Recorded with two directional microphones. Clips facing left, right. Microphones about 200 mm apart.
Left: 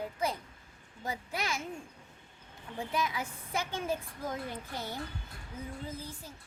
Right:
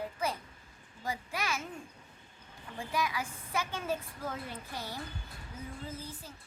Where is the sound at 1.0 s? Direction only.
20° left (ahead or behind).